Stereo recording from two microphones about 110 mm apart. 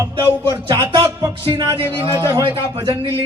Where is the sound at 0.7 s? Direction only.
30° right (ahead or behind).